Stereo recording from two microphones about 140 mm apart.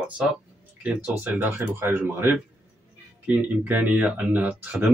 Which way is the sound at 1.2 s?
15° right (ahead or behind).